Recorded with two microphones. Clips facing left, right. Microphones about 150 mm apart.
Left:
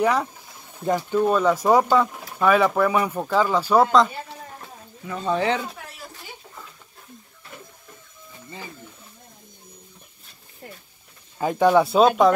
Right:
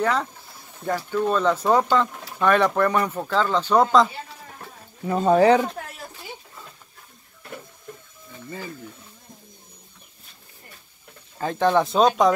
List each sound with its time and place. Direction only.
0.0 s speech: 10° left (ahead or behind)
5.0 s speech: 40° right (ahead or behind)
11.3 s speech: 15° left (ahead or behind)